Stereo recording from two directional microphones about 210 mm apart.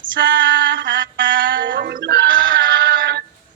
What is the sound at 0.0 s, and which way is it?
Female singing, 40° right (ahead or behind).